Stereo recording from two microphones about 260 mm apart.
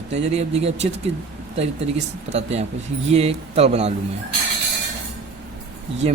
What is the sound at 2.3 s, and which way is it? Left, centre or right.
Speech, right.